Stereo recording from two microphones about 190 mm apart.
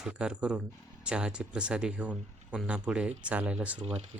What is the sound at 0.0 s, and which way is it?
Speech, 5° right (ahead or behind).